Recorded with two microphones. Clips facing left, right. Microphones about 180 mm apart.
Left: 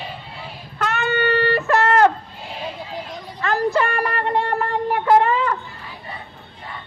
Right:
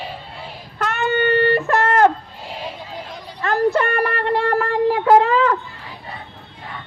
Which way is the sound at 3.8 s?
60° right (ahead or behind).